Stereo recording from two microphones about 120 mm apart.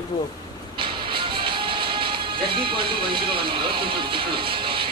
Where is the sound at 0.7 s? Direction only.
45° right (ahead or behind).